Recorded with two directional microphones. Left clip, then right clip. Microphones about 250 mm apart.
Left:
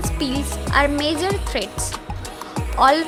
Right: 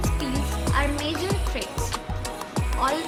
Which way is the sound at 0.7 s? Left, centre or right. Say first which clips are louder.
Left 8 dB; left.